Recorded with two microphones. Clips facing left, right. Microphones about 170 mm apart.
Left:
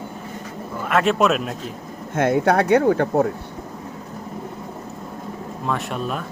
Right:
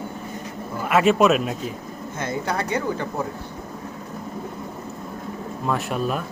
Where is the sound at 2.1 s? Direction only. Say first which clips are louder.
Left 9 dB; 65° left (ahead or behind).